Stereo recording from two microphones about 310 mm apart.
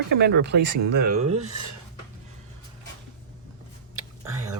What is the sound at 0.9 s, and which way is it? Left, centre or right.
Speech, right.